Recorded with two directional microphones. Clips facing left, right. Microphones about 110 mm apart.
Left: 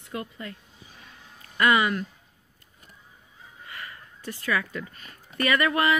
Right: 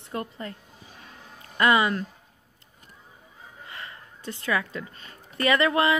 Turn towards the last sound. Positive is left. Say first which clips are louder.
# right 2 dB
turn(degrees=-20)  # may be behind; listen again after turning